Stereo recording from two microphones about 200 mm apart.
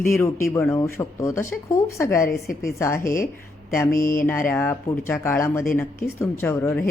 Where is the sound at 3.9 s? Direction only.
45° left (ahead or behind).